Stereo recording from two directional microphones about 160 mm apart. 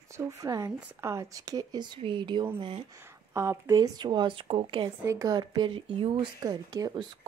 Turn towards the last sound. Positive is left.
turn(degrees=-25)  # may be behind; listen again after turning